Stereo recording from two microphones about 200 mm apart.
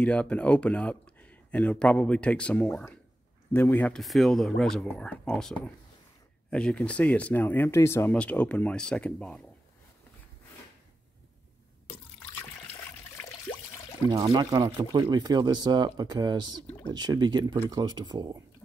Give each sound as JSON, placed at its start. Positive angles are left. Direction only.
{"t": 0.0, "sound": "speech", "side_deg": 5}
{"t": 14.1, "sound": "speech", "side_deg": -20}